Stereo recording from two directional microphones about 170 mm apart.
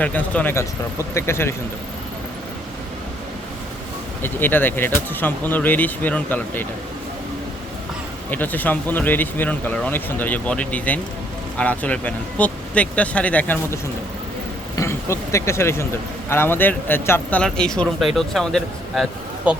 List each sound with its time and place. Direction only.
0.0 s speech: 10° left (ahead or behind)
4.2 s speech: 10° left (ahead or behind)
8.3 s speech: 10° left (ahead or behind)
14.8 s speech: 15° left (ahead or behind)